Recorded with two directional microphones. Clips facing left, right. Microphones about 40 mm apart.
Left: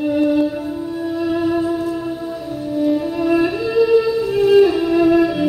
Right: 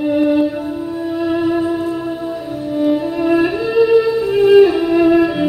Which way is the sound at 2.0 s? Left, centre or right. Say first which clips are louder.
Right 2 dB; centre.